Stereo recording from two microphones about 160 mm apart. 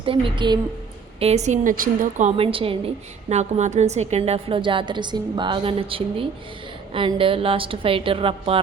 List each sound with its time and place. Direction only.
0.0 s a woman's voice: 30° right (ahead or behind)
1.2 s a woman's voice: 45° right (ahead or behind)
2.3 s a woman's voice: 35° right (ahead or behind)
3.2 s a woman's voice: 45° right (ahead or behind)